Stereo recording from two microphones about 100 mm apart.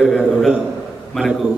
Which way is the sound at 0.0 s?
Centre (ahead or behind).